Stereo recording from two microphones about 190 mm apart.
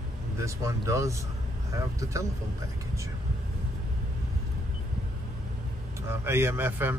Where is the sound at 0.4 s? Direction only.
15° right (ahead or behind).